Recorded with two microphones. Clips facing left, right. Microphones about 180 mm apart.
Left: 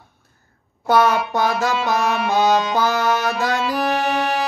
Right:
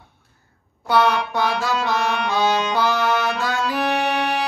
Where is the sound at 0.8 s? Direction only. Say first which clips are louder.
Left 2 dB; 45° left (ahead or behind).